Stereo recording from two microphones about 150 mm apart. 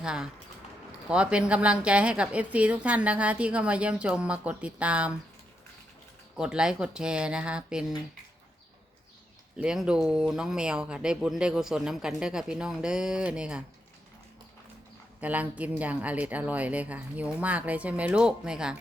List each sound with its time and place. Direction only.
0.0 s a woman's voice: 5° right (ahead or behind)
6.3 s speech: 5° right (ahead or behind)
9.6 s speech: 5° right (ahead or behind)
15.2 s a woman's voice: 10° right (ahead or behind)